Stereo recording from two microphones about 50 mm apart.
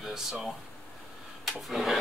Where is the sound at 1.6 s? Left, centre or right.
Centre.